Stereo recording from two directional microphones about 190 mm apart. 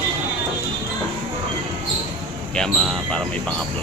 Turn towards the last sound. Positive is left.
turn(degrees=5)  # may be behind; listen again after turning